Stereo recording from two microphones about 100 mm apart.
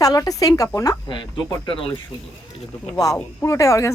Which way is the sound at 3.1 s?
30° left (ahead or behind).